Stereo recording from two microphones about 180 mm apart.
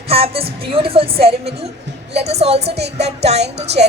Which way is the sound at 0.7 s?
30° right (ahead or behind).